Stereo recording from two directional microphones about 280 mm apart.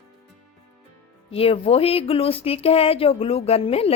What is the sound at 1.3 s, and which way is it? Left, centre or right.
Speech, centre.